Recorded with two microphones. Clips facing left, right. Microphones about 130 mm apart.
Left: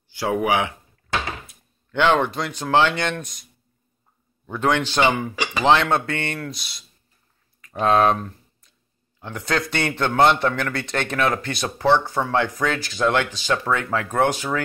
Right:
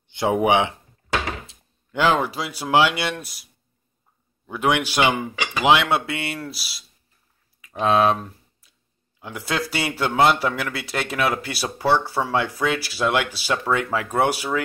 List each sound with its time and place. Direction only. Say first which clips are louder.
0.1 s speech: right 2 dB; 20° right (ahead or behind)
1.9 s speech: left 1 dB; 5° right (ahead or behind)
4.5 s speech: even; 10° right (ahead or behind)
7.6 s typing: left 1 dB; 5° right (ahead or behind)
9.2 s speech: left 2 dB; 5° right (ahead or behind)